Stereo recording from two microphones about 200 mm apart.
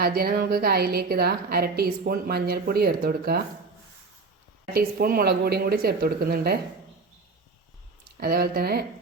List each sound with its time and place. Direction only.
0.0 s a woman's voice: 50° right (ahead or behind)
4.7 s a woman's voice: 45° right (ahead or behind)
8.2 s a woman's voice: 50° right (ahead or behind)